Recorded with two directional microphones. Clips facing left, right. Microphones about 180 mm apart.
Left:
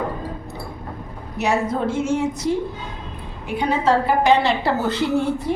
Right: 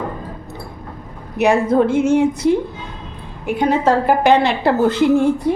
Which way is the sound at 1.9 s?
60° right (ahead or behind).